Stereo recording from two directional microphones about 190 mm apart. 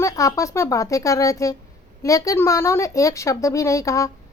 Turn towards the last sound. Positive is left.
turn(degrees=15)  # may be behind; listen again after turning